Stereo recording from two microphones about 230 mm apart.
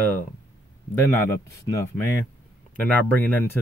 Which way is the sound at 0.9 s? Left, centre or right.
Centre.